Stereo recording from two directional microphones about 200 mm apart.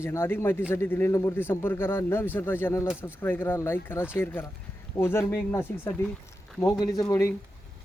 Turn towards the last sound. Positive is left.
turn(degrees=15)  # may be behind; listen again after turning